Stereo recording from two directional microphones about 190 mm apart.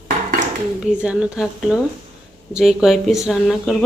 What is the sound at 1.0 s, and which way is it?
Speech, 5° right (ahead or behind).